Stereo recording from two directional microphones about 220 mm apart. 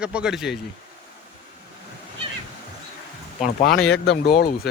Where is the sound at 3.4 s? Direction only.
45° left (ahead or behind).